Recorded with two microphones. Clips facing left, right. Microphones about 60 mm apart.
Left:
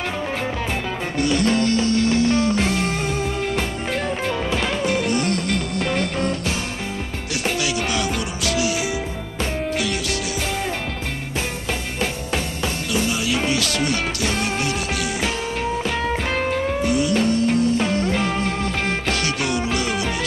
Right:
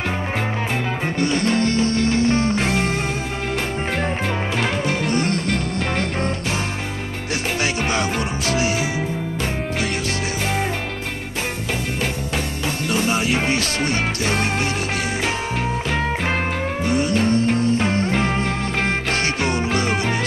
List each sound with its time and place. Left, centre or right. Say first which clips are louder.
1.1 s music: left 1 dB; right
5.0 s music: right 1 dB; right
7.6 s music: right 1 dB; right
13.1 s music: right 2 dB; right
15.9 s music: right 1 dB; right